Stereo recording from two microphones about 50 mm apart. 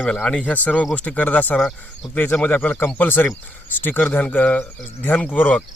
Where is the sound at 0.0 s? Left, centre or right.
Centre.